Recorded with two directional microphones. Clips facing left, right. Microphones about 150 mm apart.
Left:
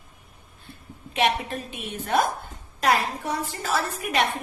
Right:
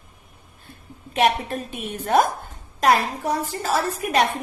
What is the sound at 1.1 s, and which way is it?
A woman's voice, 45° right (ahead or behind).